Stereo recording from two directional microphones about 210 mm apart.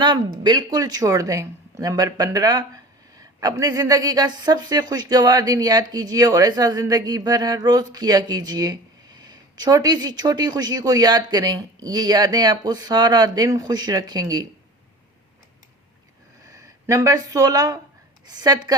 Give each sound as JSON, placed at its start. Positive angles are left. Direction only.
{"t": 0.0, "sound": "speech", "side_deg": -20}
{"t": 16.5, "sound": "speech", "side_deg": -15}